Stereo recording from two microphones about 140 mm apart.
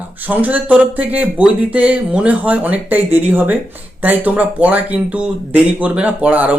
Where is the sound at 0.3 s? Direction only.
10° right (ahead or behind).